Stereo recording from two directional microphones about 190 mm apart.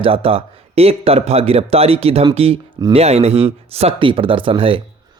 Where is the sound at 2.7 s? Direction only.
20° right (ahead or behind).